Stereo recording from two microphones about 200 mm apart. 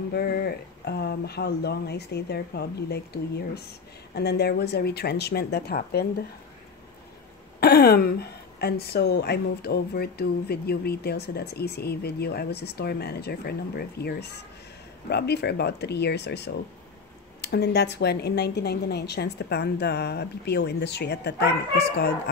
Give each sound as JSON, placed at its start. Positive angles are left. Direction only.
{"t": 0.1, "sound": "a woman's voice", "side_deg": 50}
{"t": 7.6, "sound": "a woman's voice", "side_deg": 50}